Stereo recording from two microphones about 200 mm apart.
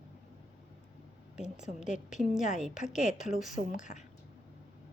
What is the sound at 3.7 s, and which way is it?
Speech, 40° left (ahead or behind).